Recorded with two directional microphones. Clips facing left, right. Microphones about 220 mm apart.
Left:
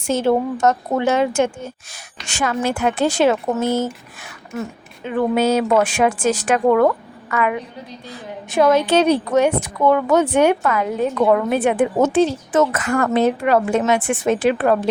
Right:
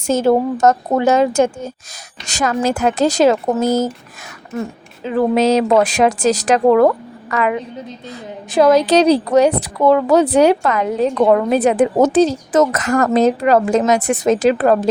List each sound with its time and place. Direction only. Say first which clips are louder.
0.1 s a woman's voice: right 3 dB; 40° right (ahead or behind)
5.0 s a woman's voice: right 3 dB; 35° right (ahead or behind)